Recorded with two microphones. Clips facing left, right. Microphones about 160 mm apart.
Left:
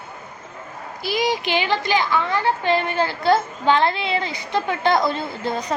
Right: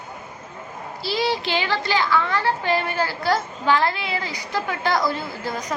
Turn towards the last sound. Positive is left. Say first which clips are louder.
# left 3 dB
turn(degrees=25)  # may be behind; listen again after turning